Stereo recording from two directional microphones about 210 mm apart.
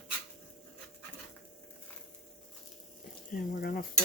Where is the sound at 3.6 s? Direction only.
45° left (ahead or behind).